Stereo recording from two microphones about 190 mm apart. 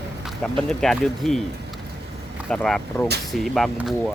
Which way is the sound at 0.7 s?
Centre (ahead or behind).